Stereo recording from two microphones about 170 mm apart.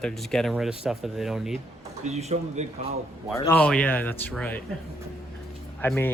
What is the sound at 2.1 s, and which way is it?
Speech, 40° right (ahead or behind).